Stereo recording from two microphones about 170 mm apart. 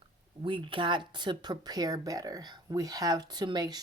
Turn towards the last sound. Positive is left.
turn(degrees=-25)  # may be behind; listen again after turning